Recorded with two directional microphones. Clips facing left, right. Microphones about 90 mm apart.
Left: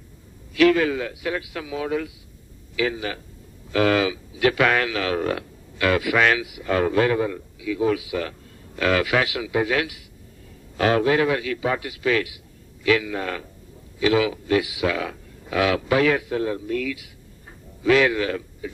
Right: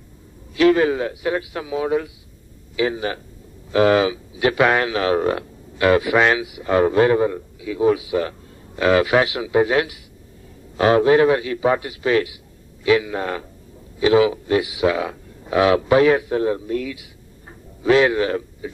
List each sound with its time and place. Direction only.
0.6 s a man's voice: 25° right (ahead or behind)